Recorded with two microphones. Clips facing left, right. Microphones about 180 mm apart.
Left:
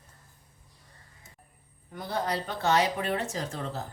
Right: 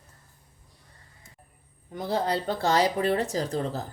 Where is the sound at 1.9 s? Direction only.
25° right (ahead or behind).